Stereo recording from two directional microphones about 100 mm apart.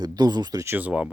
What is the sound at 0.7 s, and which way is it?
Speech, 15° right (ahead or behind).